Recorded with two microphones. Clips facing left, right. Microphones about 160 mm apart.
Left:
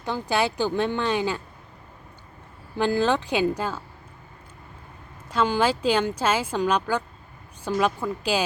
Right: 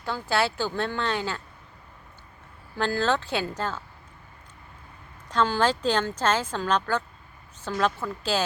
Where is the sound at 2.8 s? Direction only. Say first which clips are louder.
Left 3 dB; 15° left (ahead or behind).